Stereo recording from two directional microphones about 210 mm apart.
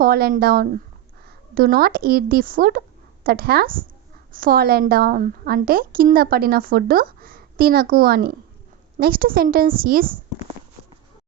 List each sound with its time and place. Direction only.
0.0 s a woman's voice: 45° right (ahead or behind)